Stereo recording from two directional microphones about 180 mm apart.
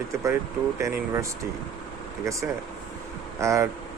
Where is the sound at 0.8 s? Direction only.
15° right (ahead or behind).